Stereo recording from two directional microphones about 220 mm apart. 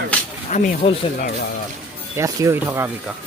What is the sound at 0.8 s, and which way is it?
Speech, 25° left (ahead or behind).